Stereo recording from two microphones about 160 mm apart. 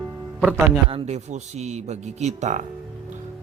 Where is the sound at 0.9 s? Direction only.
40° right (ahead or behind).